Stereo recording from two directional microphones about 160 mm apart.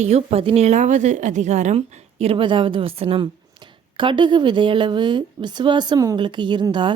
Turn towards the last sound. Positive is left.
turn(degrees=-30)  # may be behind; listen again after turning